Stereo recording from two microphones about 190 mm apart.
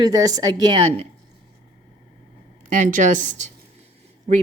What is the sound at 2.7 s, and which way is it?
Speech, 40° right (ahead or behind).